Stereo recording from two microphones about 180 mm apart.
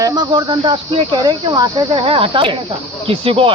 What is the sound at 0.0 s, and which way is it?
Speech, 25° right (ahead or behind).